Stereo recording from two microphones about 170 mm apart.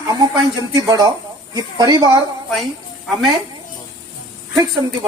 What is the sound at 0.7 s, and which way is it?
Speech, 20° right (ahead or behind).